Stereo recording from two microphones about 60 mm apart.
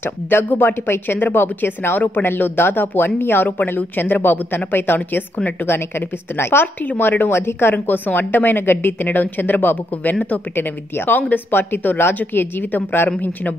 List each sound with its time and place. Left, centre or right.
0.0 s a woman's voice: left
5.9 s a woman's voice: left
7.7 s a woman's voice: left